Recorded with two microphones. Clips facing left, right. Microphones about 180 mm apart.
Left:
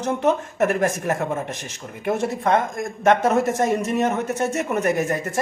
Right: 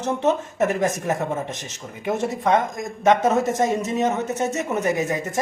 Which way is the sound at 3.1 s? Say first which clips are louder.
Even; 15° right (ahead or behind).